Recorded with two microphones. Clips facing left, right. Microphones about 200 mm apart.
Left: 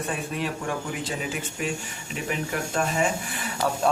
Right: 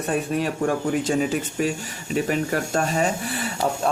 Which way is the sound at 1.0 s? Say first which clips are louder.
Right 8 dB; 40° right (ahead or behind).